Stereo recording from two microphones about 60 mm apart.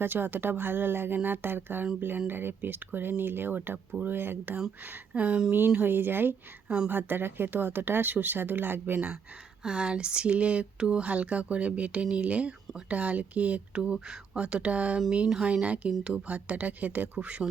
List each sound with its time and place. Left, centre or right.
0.0 s speech: right
9.6 s speech: centre